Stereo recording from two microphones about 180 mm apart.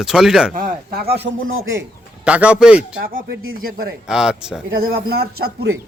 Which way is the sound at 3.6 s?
55° right (ahead or behind).